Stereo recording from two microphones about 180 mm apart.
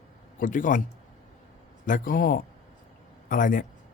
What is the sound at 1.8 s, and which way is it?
Speech, 45° left (ahead or behind).